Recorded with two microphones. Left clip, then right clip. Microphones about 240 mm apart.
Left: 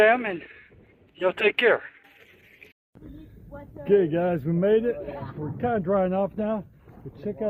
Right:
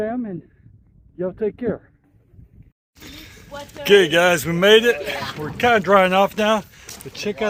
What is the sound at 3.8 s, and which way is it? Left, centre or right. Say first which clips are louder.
A man's voice: right 8 dB; right.